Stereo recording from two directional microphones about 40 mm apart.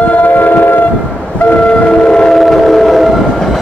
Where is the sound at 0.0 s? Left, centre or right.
Left.